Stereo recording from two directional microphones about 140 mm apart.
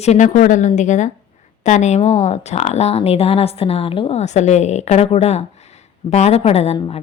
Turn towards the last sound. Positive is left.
turn(degrees=35)  # may be behind; listen again after turning